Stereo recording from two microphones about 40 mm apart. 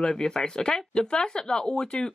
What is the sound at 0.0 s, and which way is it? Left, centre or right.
Speech, centre.